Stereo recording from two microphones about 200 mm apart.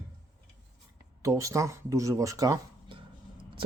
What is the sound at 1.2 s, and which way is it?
Speech, 15° right (ahead or behind).